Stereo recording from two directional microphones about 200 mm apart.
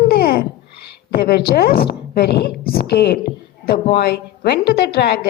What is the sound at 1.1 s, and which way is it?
A woman's voice, 50° left (ahead or behind).